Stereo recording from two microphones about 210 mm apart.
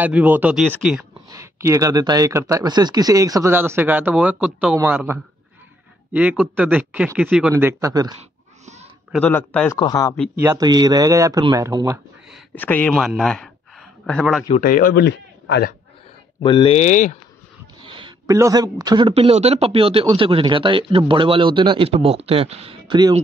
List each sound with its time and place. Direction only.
0.0 s speech: 10° right (ahead or behind)
9.1 s speech: 10° left (ahead or behind)
9.8 s speech: 20° left (ahead or behind)
10.4 s speech: 15° right (ahead or behind)
12.5 s speech: 10° left (ahead or behind)
14.5 s speech: 40° left (ahead or behind)
16.4 s speech: 25° left (ahead or behind)
17.8 s a man's voice: 25° right (ahead or behind)